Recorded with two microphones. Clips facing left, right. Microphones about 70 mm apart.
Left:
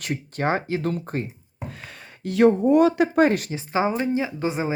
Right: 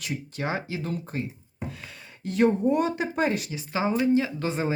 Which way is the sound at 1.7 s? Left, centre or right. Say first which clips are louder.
Left 2 dB; left.